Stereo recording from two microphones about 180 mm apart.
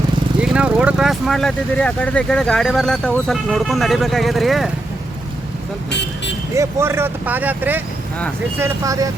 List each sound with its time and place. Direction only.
0.4 s speech: 5° right (ahead or behind)
5.9 s speech: 70° left (ahead or behind)
6.6 s speech: 15° right (ahead or behind)